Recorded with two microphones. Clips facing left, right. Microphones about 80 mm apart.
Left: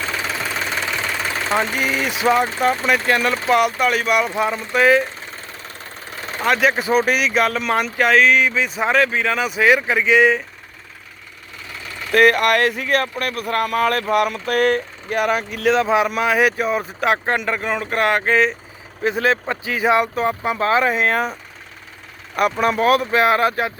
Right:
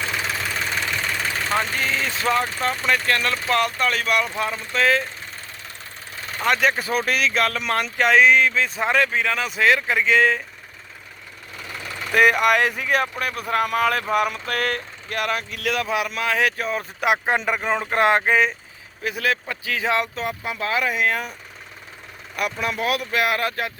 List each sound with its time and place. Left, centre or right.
1.5 s speech: centre
6.4 s speech: centre
6.7 s speech: centre
12.1 s speech: centre
14.4 s speech: centre
17.0 s speech: centre
17.3 s speech: centre
18.2 s speech: centre
19.0 s speech: left
20.2 s speech: left
22.4 s speech: left